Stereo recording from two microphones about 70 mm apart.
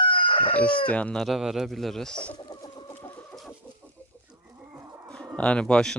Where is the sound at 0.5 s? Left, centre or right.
Centre.